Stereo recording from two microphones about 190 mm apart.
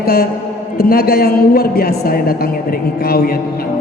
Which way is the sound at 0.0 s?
55° left (ahead or behind).